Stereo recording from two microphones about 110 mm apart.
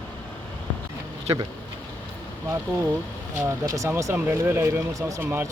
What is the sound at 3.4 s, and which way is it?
Speech, 25° right (ahead or behind).